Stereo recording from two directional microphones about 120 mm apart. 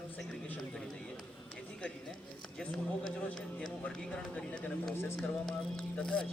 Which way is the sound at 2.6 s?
5° left (ahead or behind).